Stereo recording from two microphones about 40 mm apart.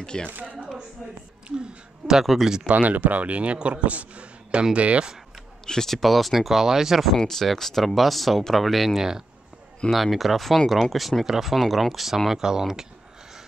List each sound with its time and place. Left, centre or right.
0.0 s a woman's voice: left
2.2 s speech: centre
2.7 s a man's voice: right
5.7 s speech: centre
7.2 s speech: centre